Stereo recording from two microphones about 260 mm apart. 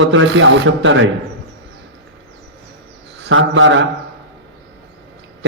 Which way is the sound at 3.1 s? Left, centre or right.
Right.